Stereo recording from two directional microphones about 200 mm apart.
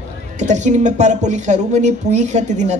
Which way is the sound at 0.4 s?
35° right (ahead or behind).